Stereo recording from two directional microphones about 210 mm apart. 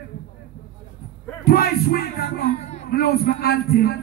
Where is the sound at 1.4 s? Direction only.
45° left (ahead or behind).